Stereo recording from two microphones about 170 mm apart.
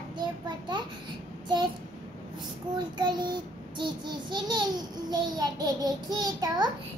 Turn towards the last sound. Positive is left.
turn(degrees=-25)  # may be behind; listen again after turning